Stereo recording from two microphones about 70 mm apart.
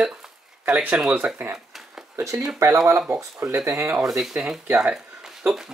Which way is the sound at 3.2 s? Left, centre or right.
Right.